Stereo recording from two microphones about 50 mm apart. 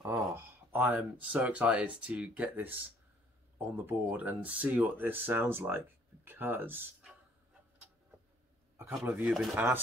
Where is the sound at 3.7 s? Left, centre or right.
Right.